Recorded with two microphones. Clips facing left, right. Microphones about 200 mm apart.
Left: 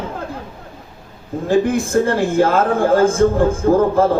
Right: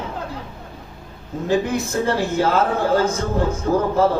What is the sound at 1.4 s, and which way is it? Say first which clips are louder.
Speech: left 4 dB; 50° left (ahead or behind).